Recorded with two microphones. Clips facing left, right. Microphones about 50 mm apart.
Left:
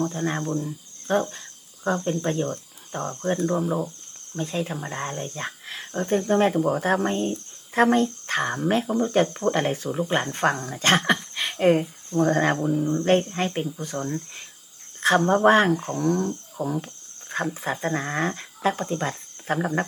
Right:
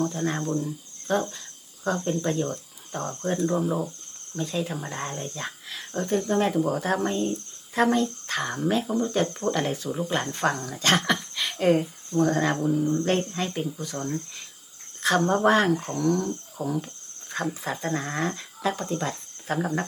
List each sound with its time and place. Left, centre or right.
0.0 s speech: left
1.1 s speech: left; by 3.8 s centre
4.4 s speech: left
4.7 s speech: centre
11.3 s a sound: left
12.1 s speech: left
12.6 s speech: centre
13.1 s speech: left
15.0 s speech: left
19.5 s speech: left